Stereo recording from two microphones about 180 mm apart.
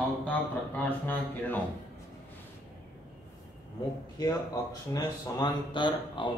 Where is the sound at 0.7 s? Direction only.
10° left (ahead or behind).